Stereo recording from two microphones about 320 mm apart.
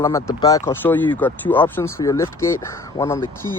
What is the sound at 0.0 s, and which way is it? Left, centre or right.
Speech, centre.